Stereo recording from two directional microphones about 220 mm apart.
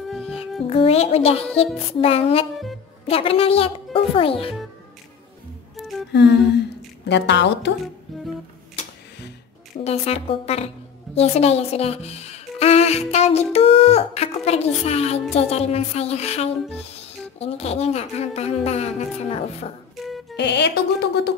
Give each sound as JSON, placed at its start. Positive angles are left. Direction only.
{"t": 0.7, "sound": "speech", "side_deg": 30}
{"t": 2.5, "sound": "a woman's voice", "side_deg": 0}
{"t": 3.1, "sound": "speech", "side_deg": 25}
{"t": 5.8, "sound": "music", "side_deg": 0}
{"t": 7.1, "sound": "speech", "side_deg": 50}
{"t": 8.1, "sound": "music", "side_deg": 0}
{"t": 9.8, "sound": "speech", "side_deg": 30}
{"t": 20.1, "sound": "music", "side_deg": 0}
{"t": 20.3, "sound": "speech", "side_deg": 50}